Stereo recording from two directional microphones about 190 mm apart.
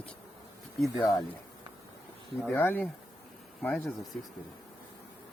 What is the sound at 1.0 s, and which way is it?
Speech, 20° left (ahead or behind).